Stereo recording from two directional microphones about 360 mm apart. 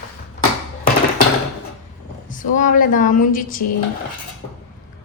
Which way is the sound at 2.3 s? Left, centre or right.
Left.